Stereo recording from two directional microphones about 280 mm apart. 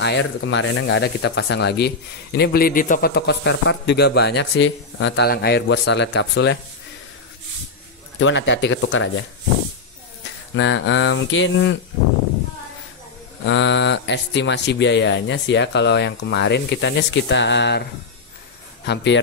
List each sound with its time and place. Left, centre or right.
0.0 s speech: left
8.2 s speech: left
10.5 s speech: left
13.5 s speech: left
18.9 s speech: left